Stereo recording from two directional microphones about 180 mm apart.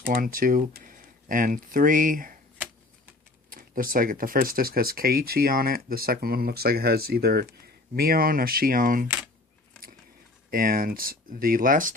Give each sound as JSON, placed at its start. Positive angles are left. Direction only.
{"t": 0.1, "sound": "speech", "side_deg": -50}
{"t": 3.5, "sound": "speech", "side_deg": -50}
{"t": 10.5, "sound": "speech", "side_deg": -50}